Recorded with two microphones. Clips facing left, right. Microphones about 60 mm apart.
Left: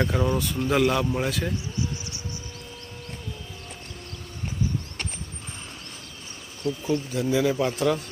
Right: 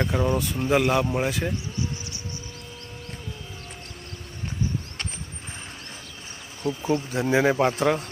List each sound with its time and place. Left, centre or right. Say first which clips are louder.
0.0 s speech: even; centre
6.9 s speech: right 2 dB; right